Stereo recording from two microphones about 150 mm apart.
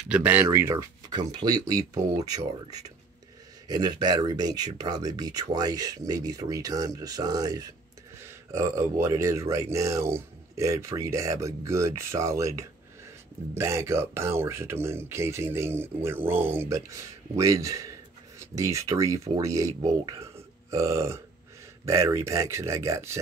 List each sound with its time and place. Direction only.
0.1 s speech: 10° right (ahead or behind)
1.1 s speech: 30° right (ahead or behind)